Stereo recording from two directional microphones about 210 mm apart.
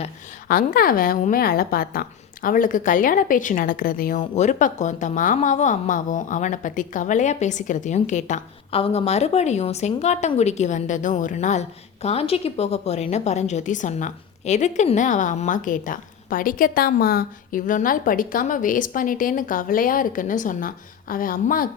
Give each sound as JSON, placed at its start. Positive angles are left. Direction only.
{"t": 0.4, "sound": "a woman's voice", "side_deg": 45}